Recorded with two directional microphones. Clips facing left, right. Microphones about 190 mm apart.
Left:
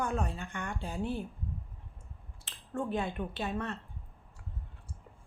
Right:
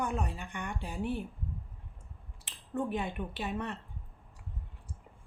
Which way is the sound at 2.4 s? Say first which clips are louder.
Right 1 dB; 15° right (ahead or behind).